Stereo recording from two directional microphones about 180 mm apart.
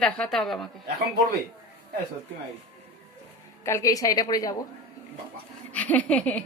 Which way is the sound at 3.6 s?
15° left (ahead or behind).